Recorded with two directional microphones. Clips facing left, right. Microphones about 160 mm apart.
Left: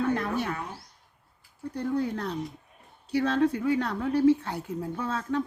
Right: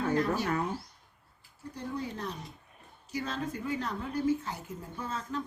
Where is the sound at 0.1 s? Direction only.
60° left (ahead or behind).